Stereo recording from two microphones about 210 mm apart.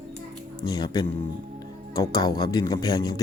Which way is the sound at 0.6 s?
20° left (ahead or behind).